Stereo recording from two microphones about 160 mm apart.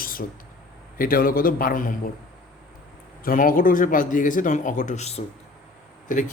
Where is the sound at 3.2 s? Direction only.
60° left (ahead or behind).